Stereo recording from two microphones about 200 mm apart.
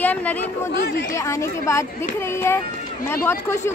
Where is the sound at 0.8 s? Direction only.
55° left (ahead or behind).